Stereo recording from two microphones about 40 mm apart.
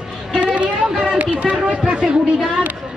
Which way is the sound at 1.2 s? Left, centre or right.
Right.